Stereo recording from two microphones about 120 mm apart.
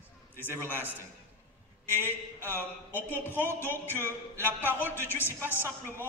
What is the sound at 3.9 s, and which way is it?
Speech, 20° right (ahead or behind).